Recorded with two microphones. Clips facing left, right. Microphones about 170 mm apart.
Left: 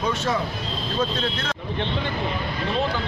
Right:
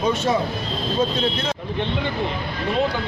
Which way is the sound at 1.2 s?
20° right (ahead or behind).